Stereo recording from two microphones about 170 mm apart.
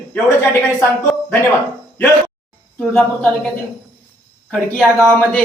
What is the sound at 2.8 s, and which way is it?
Speech, 10° left (ahead or behind).